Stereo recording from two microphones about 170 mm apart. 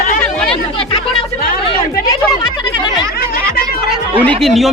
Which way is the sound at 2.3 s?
25° left (ahead or behind).